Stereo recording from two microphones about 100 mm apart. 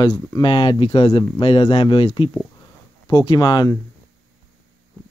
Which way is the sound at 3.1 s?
45° left (ahead or behind).